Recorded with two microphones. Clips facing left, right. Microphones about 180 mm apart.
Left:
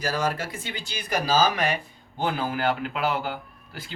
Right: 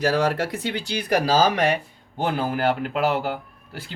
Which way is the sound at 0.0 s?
70° right (ahead or behind).